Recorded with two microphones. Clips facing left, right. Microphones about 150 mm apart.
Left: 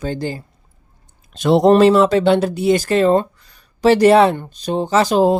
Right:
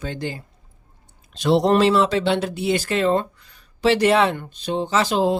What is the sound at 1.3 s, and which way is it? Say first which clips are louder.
Speech: left 5 dB; 50° left (ahead or behind).